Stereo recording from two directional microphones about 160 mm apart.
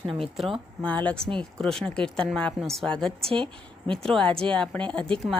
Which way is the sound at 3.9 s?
5° left (ahead or behind).